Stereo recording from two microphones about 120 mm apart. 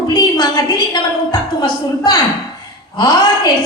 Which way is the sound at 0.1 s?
35° left (ahead or behind).